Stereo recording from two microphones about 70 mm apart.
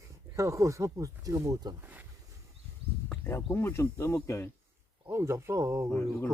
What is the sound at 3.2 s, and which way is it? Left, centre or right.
Speech, left.